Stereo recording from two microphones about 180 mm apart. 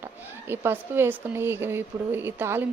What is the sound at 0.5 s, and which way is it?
A woman's voice, 10° right (ahead or behind).